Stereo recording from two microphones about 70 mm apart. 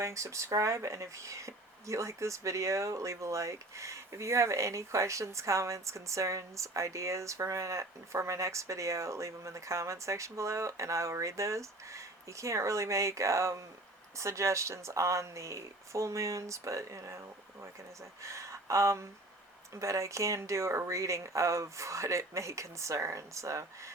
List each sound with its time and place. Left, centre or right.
0.0 s speech: right